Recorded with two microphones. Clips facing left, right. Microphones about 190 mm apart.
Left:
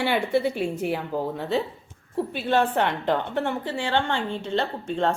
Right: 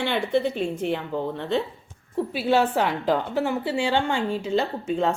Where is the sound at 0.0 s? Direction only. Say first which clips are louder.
Even; 10° left (ahead or behind).